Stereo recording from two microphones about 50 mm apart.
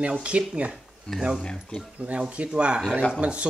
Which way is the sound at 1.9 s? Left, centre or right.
Right.